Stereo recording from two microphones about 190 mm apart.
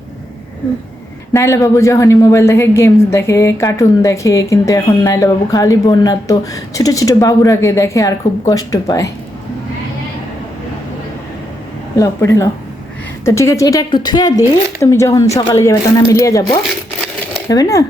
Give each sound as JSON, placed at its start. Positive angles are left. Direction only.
{"t": 1.3, "sound": "a woman's voice", "side_deg": 15}
{"t": 11.9, "sound": "a woman's voice", "side_deg": 15}